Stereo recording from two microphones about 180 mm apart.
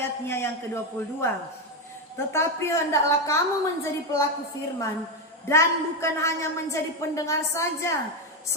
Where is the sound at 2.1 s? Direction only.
15° left (ahead or behind).